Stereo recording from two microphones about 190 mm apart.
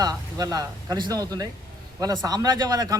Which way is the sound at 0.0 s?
20° right (ahead or behind).